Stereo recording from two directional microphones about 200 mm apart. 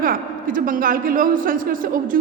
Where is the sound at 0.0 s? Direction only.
45° right (ahead or behind).